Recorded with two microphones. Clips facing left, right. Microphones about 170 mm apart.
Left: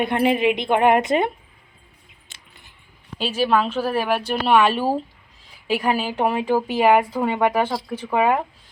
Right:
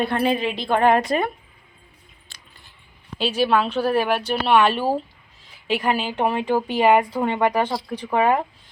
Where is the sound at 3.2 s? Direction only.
10° left (ahead or behind).